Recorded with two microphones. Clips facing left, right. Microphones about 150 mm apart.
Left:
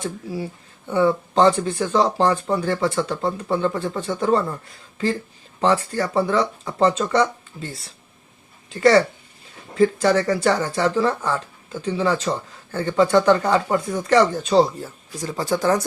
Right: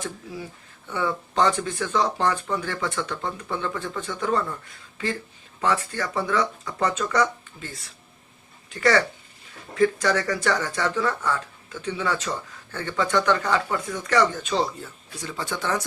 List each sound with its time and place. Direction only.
0.0 s speech: 30° left (ahead or behind)
5.5 s speech: 30° left (ahead or behind)